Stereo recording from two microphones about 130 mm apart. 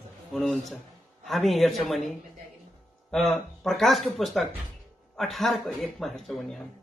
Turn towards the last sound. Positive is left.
turn(degrees=5)  # may be behind; listen again after turning